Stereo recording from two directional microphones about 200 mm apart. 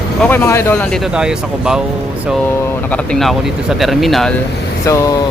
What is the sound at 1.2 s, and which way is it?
Speech, 5° right (ahead or behind).